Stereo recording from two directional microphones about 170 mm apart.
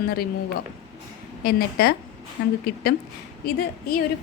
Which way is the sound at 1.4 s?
60° left (ahead or behind).